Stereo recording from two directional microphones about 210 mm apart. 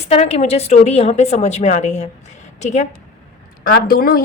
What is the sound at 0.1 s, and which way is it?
A woman's voice, 30° left (ahead or behind).